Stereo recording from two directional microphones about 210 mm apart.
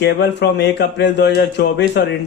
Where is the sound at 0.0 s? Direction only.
55° left (ahead or behind).